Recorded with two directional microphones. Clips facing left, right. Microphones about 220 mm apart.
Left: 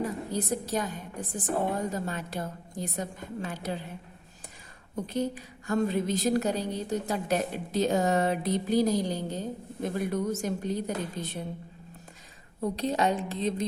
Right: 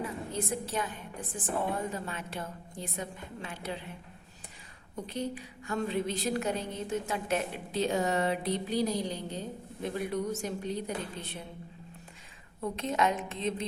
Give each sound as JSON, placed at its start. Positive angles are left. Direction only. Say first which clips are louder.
{"t": 0.0, "sound": "a woman's voice", "louder": "left 4 dB", "side_deg": 40}
{"t": 5.0, "sound": "a woman's voice", "louder": "left 5 dB", "side_deg": 45}
{"t": 12.6, "sound": "a woman's voice", "louder": "left 3 dB", "side_deg": 35}